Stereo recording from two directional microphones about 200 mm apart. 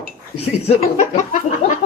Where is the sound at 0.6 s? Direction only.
40° left (ahead or behind).